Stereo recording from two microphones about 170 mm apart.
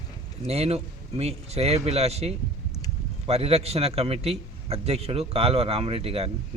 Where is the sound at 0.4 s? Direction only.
35° right (ahead or behind).